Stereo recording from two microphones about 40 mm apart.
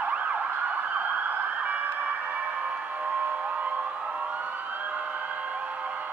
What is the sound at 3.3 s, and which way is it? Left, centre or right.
Emergency vehicle, right.